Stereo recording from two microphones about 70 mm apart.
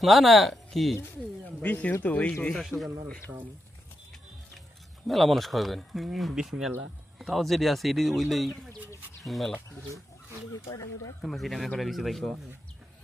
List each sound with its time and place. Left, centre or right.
0.0 s speech: centre
1.5 s speech: left
2.6 s speech: centre
5.0 s speech: centre
10.5 s speech: left
11.2 s speech: centre